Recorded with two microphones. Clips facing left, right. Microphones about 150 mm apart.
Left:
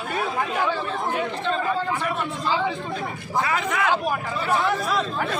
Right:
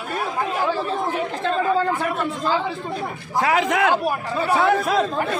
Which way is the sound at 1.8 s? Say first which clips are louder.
Right 4 dB; 50° right (ahead or behind).